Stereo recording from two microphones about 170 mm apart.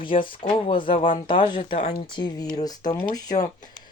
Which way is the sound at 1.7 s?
50° left (ahead or behind).